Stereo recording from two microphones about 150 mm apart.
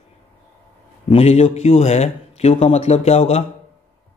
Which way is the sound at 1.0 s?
45° left (ahead or behind).